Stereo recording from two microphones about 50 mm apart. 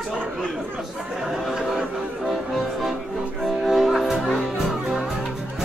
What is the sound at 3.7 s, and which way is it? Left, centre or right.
Music, centre.